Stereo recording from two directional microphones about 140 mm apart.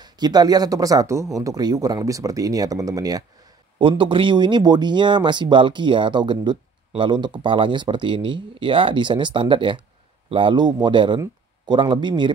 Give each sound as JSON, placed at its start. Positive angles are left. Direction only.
{"t": 0.0, "sound": "speech", "side_deg": -30}
{"t": 3.9, "sound": "speech", "side_deg": -35}